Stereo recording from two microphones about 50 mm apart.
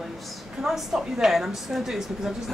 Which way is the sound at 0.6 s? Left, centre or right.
Centre.